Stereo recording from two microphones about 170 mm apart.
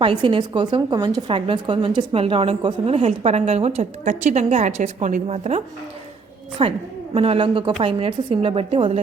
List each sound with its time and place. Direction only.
0.0 s a woman's voice: 30° right (ahead or behind)